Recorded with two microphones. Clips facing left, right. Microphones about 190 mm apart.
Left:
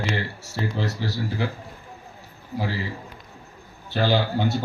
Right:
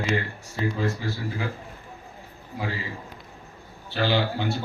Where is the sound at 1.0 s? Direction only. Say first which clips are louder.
Left 3 dB; 80° left.